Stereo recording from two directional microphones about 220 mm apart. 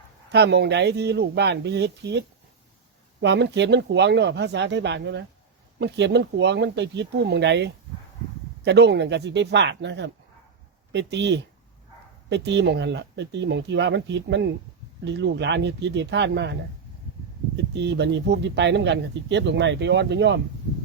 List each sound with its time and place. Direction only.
0.3 s speech: 50° right (ahead or behind)
17.7 s speech: 50° right (ahead or behind)